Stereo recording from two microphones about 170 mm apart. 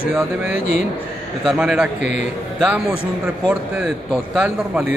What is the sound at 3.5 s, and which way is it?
A man's voice, centre (ahead or behind).